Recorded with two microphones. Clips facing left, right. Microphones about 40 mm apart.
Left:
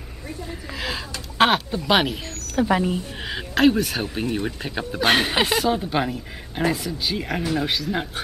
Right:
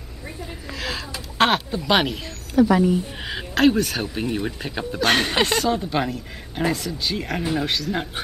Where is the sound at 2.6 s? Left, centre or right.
Left.